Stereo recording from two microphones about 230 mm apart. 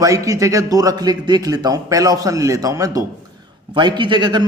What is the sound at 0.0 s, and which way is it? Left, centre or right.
A man's voice, centre.